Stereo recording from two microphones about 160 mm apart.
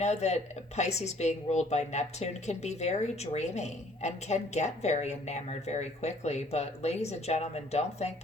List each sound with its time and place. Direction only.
0.0 s speech: 45° left (ahead or behind)